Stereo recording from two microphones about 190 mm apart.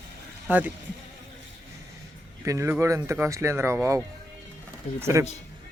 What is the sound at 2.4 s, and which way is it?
Speech, 15° right (ahead or behind).